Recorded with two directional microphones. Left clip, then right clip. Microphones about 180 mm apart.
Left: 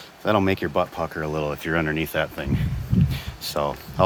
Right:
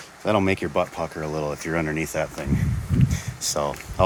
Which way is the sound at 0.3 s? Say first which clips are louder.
Left 1 dB; centre (ahead or behind).